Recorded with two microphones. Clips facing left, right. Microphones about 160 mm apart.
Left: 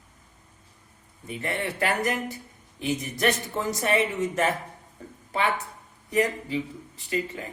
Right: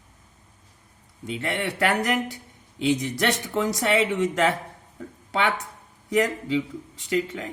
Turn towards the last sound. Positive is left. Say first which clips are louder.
# right 4 dB
turn(degrees=-90)